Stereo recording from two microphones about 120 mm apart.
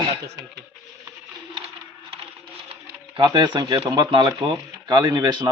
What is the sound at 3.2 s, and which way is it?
Speech, 40° right (ahead or behind).